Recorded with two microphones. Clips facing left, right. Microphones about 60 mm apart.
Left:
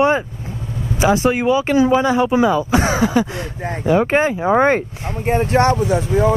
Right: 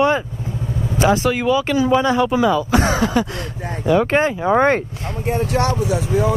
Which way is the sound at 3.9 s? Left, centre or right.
Centre.